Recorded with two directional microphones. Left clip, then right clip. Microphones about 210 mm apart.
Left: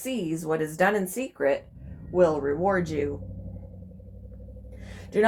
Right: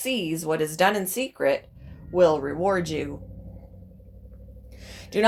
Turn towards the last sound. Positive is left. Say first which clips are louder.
# even
turn(degrees=-25)  # may be behind; listen again after turning